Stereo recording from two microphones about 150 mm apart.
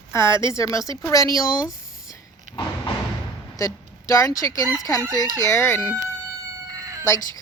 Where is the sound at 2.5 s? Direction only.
60° right (ahead or behind).